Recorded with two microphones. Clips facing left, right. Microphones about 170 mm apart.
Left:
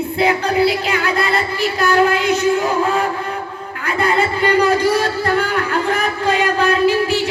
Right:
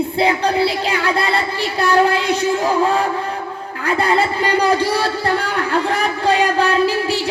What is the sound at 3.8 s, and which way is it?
Speech, 35° right (ahead or behind).